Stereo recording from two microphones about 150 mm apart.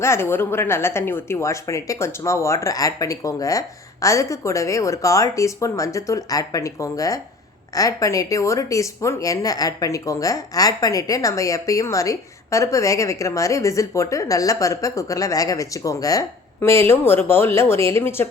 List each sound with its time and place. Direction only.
0.0 s speech: 15° left (ahead or behind)